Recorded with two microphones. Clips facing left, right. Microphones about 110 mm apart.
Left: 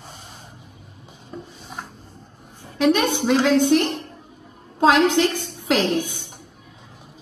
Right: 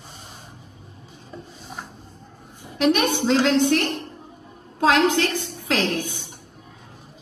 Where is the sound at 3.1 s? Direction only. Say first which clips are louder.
Left 1 dB; 15° left (ahead or behind).